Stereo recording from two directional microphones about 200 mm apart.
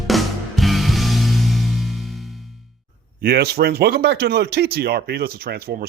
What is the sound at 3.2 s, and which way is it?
Speech, 55° right (ahead or behind).